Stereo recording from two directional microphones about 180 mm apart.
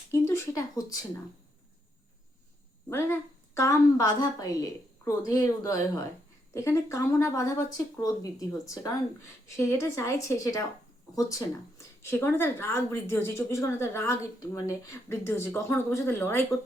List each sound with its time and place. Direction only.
0.1 s speech: 15° left (ahead or behind)
2.9 s a woman's voice: 15° left (ahead or behind)
12.0 s a woman's voice: 15° left (ahead or behind)